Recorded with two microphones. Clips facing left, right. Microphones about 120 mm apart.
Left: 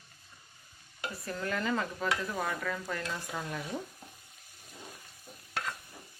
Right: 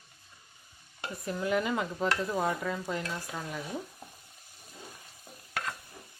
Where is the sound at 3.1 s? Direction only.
Centre (ahead or behind).